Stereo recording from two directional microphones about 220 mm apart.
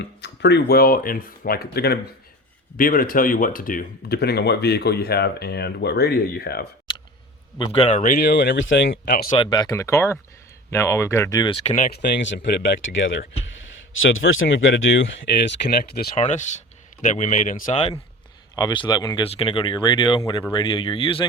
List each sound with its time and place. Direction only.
0.0 s speech: 50° left (ahead or behind)
7.6 s speech: 25° left (ahead or behind); by 9.3 s 50° left (ahead or behind)
9.4 s speech: 20° left (ahead or behind)
12.2 s speech: 55° left (ahead or behind)
15.7 s speech: 45° left (ahead or behind)
16.1 s speech: 35° left (ahead or behind)